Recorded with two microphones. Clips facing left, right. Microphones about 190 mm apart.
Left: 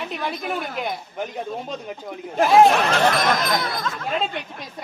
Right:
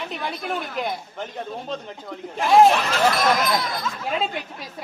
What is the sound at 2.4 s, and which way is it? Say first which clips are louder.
Speech: left 1 dB; centre (ahead or behind).